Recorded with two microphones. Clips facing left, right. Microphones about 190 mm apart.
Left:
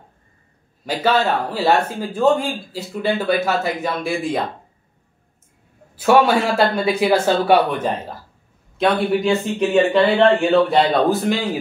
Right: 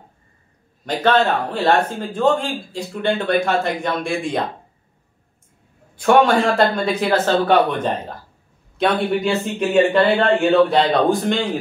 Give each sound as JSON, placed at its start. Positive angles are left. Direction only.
{"t": 0.8, "sound": "a man's voice", "side_deg": 5}
{"t": 5.9, "sound": "a man's voice", "side_deg": 5}